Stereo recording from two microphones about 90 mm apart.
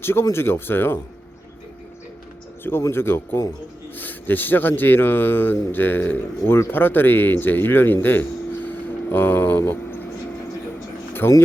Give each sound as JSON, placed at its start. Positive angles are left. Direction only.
{"t": 0.0, "sound": "speech", "side_deg": 25}
{"t": 2.9, "sound": "speech", "side_deg": 25}
{"t": 8.0, "sound": "a sound", "side_deg": 20}
{"t": 11.2, "sound": "speech", "side_deg": 30}